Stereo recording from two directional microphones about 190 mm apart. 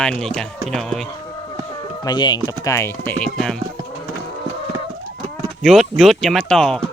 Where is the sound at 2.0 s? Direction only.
25° left (ahead or behind); by 3.6 s 5° left (ahead or behind).